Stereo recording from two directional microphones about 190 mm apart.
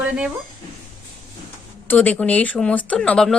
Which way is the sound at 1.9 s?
10° left (ahead or behind).